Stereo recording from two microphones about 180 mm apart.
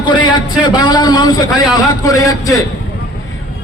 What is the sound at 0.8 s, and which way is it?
A man's voice, 25° left (ahead or behind).